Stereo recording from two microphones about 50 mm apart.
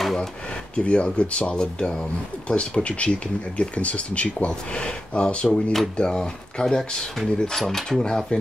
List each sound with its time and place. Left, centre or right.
0.0 s drawer open or close: centre
0.7 s speech: left